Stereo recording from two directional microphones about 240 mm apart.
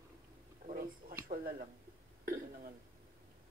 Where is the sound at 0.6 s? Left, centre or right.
Right.